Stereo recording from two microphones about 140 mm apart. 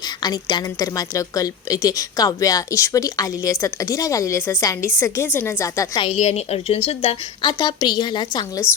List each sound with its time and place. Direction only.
0.2 s a woman's voice: 30° left (ahead or behind)
6.0 s a woman's voice: 50° left (ahead or behind)
7.4 s a woman's voice: 30° left (ahead or behind)